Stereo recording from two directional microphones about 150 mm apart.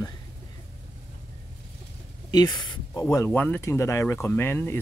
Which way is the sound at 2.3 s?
30° left (ahead or behind).